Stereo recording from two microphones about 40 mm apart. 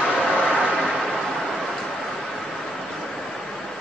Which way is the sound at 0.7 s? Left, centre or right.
Centre.